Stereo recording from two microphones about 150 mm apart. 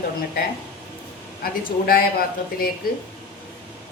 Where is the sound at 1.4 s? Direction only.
80° left.